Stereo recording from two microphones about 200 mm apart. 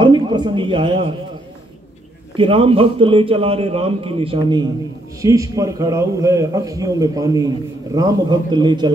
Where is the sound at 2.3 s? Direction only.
25° right (ahead or behind).